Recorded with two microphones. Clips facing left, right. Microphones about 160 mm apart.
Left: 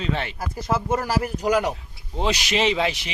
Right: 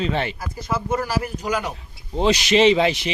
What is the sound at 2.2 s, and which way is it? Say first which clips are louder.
Speech: right 7 dB; 5° left (ahead or behind).